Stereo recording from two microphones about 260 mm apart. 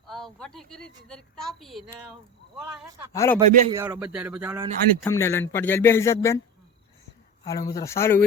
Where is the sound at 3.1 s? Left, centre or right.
Centre.